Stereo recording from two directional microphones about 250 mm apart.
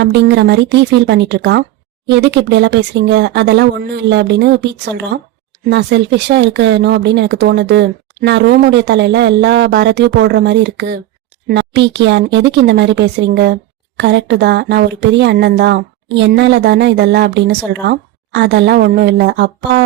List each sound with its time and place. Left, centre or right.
0.0 s a woman's voice: right